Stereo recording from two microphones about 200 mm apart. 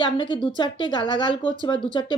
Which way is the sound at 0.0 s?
25° left (ahead or behind).